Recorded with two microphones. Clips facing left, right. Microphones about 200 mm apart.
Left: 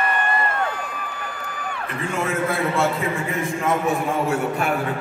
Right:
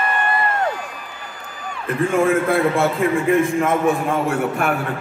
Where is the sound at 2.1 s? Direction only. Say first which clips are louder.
Right 6 dB; 55° right (ahead or behind).